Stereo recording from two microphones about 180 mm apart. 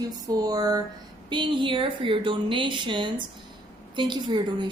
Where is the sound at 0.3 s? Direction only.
20° right (ahead or behind).